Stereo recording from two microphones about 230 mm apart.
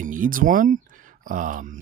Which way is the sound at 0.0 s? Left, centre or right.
Right.